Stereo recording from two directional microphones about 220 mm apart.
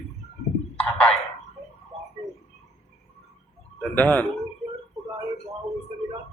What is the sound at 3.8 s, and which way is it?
Speech, 5° left (ahead or behind).